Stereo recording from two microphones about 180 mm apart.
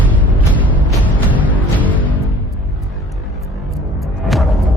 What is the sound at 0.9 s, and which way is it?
Music, 10° left (ahead or behind).